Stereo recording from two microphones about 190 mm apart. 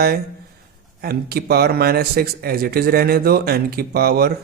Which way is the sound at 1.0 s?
55° right (ahead or behind).